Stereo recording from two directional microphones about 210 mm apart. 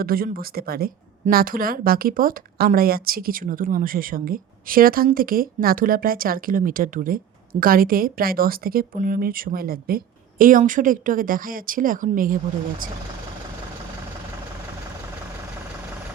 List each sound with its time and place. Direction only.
0.0 s a woman's voice: 45° right (ahead or behind)